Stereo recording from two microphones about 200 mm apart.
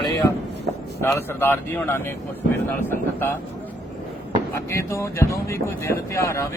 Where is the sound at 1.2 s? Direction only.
10° left (ahead or behind).